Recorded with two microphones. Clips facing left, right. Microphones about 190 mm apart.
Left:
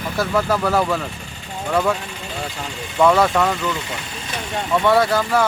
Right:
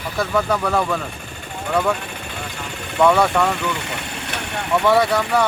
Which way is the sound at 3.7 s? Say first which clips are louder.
Right 1 dB; 70° right (ahead or behind).